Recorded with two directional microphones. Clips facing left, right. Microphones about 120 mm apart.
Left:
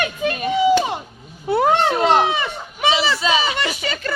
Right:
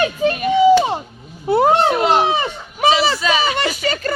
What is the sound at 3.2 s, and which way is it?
Speech, 25° left (ahead or behind).